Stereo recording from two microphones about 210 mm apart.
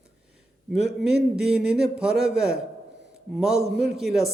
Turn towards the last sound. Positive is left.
turn(degrees=0)  # may be behind; listen again after turning